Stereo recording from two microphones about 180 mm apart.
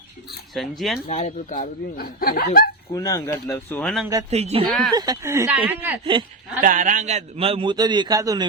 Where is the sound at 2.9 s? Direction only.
20° left (ahead or behind); by 4.1 s centre (ahead or behind).